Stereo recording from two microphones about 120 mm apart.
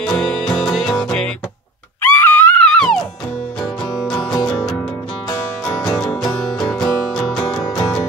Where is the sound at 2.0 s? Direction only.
15° left (ahead or behind).